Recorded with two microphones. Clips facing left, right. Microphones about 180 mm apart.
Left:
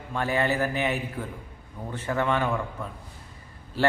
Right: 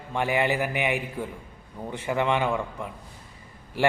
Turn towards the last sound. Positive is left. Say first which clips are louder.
# right 1 dB
turn(degrees=-15)  # may be behind; listen again after turning